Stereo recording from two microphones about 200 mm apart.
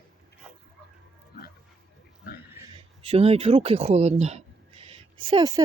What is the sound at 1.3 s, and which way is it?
Dog, 50° left (ahead or behind).